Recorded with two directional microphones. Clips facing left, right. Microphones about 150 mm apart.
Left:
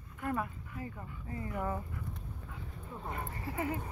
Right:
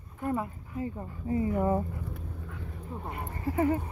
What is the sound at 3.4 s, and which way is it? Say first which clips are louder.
Speech: right 10 dB; 40° right (ahead or behind).